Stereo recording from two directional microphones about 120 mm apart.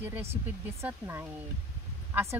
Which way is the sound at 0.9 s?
15° right (ahead or behind).